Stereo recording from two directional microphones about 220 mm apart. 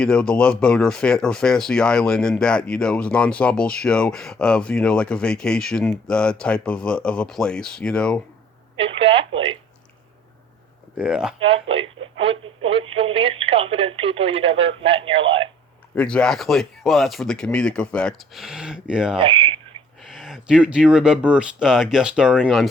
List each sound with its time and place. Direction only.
0.0 s speech: 5° left (ahead or behind)
8.7 s telephone: 25° right (ahead or behind)
10.9 s speech: 5° right (ahead or behind)
11.3 s speech: 25° right (ahead or behind)
16.0 s speech: 5° left (ahead or behind)
19.2 s speech: 25° right (ahead or behind)
20.1 s speech: centre (ahead or behind)